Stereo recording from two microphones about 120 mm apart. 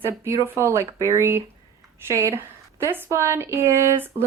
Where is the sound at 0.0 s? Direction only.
25° right (ahead or behind).